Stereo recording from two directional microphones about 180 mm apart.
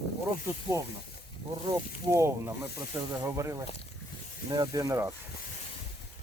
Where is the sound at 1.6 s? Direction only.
15° right (ahead or behind).